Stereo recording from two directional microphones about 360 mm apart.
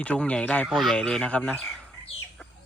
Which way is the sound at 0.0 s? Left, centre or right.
Centre.